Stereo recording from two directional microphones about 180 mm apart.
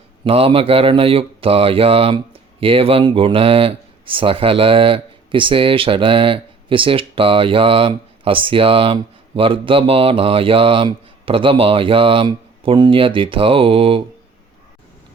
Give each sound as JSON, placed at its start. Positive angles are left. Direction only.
{"t": 0.3, "sound": "speech", "side_deg": -30}